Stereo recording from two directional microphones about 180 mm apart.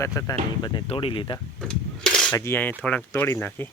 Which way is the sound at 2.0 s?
5° left (ahead or behind).